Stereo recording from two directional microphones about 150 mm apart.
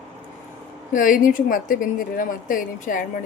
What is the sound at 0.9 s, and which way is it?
A woman's voice, 65° left (ahead or behind).